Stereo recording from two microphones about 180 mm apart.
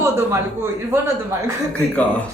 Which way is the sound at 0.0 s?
15° right (ahead or behind).